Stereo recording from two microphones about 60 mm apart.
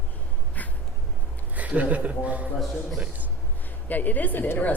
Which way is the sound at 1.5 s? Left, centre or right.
Right.